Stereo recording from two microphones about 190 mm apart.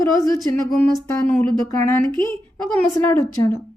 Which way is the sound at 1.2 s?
5° left (ahead or behind).